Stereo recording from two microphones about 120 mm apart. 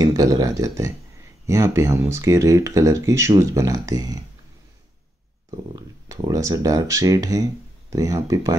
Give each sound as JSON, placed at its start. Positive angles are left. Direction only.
{"t": 0.0, "sound": "speech", "side_deg": -30}
{"t": 6.0, "sound": "speech", "side_deg": -25}